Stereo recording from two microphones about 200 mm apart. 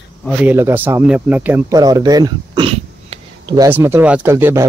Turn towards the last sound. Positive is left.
turn(degrees=-10)  # may be behind; listen again after turning